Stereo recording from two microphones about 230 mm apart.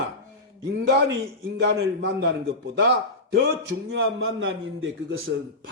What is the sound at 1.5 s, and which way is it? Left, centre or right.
A man's voice, right.